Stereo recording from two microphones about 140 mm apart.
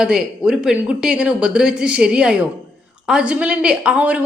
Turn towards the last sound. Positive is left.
turn(degrees=-10)  # may be behind; listen again after turning